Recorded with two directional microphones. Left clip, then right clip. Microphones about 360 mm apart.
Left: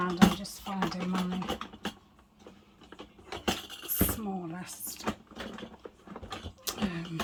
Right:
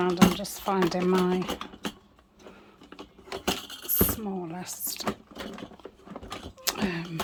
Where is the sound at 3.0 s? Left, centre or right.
Right.